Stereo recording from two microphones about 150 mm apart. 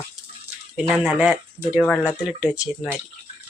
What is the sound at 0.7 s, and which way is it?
Speech, 5° right (ahead or behind).